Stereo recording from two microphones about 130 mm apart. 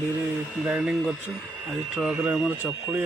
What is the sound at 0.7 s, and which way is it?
Speech, 5° right (ahead or behind).